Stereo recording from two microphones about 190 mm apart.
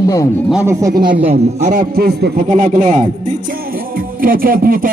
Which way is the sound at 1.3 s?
35° right (ahead or behind).